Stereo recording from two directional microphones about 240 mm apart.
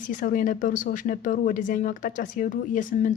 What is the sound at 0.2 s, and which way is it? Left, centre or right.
Speech, left.